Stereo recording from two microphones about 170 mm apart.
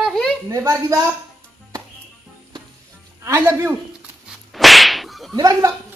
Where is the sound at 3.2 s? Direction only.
15° right (ahead or behind).